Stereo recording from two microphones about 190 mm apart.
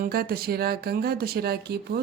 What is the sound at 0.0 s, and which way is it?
A woman's voice, 55° right (ahead or behind).